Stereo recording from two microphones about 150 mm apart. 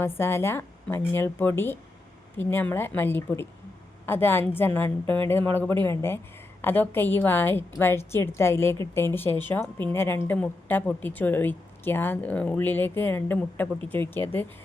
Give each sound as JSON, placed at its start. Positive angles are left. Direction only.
{"t": 0.0, "sound": "a woman's voice", "side_deg": 15}